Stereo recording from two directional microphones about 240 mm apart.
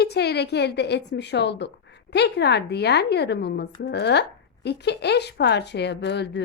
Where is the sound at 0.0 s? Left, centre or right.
Left.